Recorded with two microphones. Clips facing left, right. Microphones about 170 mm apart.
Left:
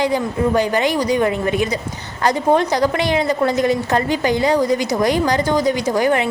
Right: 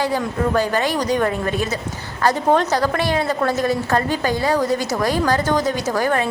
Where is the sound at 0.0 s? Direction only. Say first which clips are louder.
Left 3 dB; 15° left (ahead or behind).